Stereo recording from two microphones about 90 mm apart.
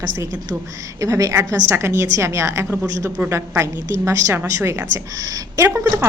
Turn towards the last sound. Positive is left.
turn(degrees=-30)  # may be behind; listen again after turning